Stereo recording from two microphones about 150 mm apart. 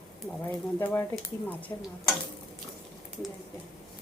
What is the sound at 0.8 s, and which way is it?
Speech, 15° left (ahead or behind).